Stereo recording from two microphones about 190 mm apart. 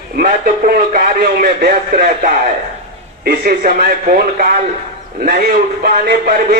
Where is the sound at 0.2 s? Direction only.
45° right (ahead or behind).